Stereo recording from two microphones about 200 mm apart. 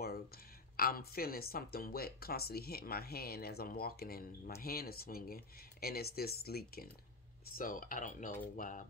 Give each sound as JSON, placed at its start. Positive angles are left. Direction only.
{"t": 0.7, "sound": "speech", "side_deg": 50}